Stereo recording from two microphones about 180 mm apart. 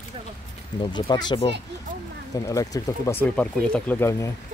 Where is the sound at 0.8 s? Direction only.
25° left (ahead or behind).